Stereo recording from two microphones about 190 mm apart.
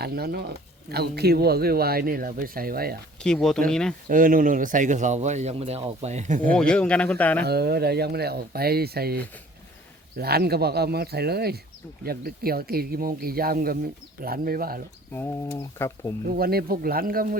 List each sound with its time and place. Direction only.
0.0 s speech: 55° right (ahead or behind)
3.2 s speech: 5° left (ahead or behind)
4.1 s speech: 45° right (ahead or behind)
6.5 s speech: 5° left (ahead or behind)
7.4 s speech: 60° right (ahead or behind)
15.1 s speech: 10° left (ahead or behind)
16.2 s speech: 50° right (ahead or behind)